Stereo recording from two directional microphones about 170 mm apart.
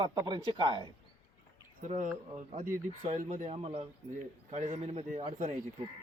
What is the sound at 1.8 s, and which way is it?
A man's voice, 50° right (ahead or behind).